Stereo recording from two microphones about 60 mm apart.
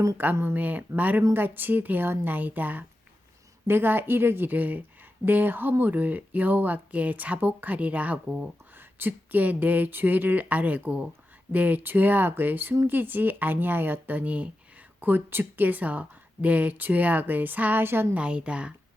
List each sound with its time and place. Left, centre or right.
0.5 s speech: right
8.7 s speech: right
18.1 s speech: centre